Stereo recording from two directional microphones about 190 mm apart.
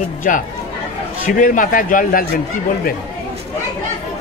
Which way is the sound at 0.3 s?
45° left (ahead or behind).